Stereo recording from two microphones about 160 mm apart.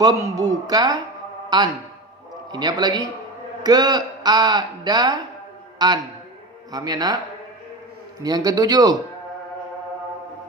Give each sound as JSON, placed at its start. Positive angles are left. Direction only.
{"t": 0.0, "sound": "a man's voice", "side_deg": -20}
{"t": 8.2, "sound": "a man's voice", "side_deg": -25}